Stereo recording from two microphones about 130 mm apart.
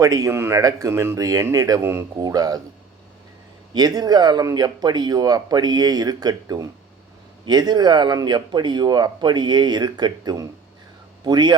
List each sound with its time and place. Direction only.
0.0 s speech: 25° right (ahead or behind)
3.7 s speech: 30° right (ahead or behind)